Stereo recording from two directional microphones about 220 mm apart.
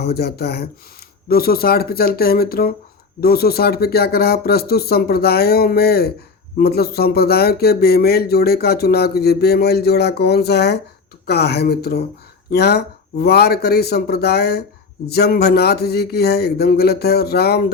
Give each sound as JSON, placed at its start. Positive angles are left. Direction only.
{"t": 0.0, "sound": "speech", "side_deg": 45}